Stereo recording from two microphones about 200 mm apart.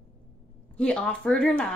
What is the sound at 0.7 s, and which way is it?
Speech, 5° left (ahead or behind).